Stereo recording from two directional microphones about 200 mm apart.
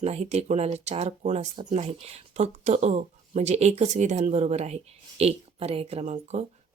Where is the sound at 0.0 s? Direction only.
35° right (ahead or behind).